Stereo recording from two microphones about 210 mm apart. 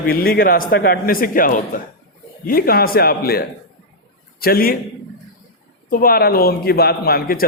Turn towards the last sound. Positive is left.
turn(degrees=45)  # may be behind; listen again after turning